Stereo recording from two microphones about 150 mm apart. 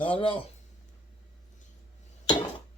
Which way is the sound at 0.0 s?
35° left (ahead or behind).